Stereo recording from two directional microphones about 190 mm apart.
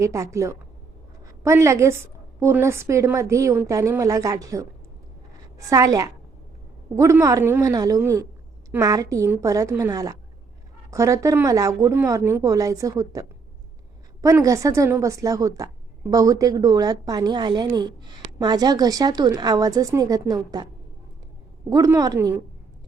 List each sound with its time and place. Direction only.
0.0 s a woman's voice: 15° right (ahead or behind)
21.7 s a woman's voice: 20° right (ahead or behind)